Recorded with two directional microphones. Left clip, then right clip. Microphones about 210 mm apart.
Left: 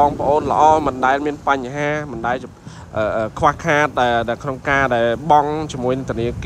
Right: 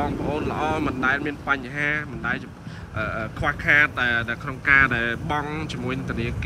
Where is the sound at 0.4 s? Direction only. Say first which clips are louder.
Left 13 dB; 15° left (ahead or behind).